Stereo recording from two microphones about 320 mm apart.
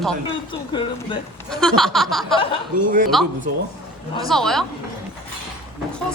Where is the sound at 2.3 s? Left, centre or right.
Centre.